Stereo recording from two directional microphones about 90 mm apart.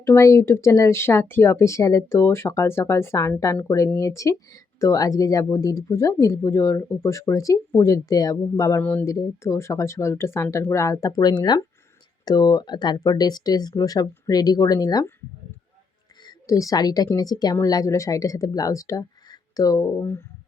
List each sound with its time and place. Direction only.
0.0 s speech: 35° left (ahead or behind)
8.8 s speech: 20° left (ahead or behind)
9.0 s speech: 35° left (ahead or behind)
16.2 s a woman's voice: 40° left (ahead or behind)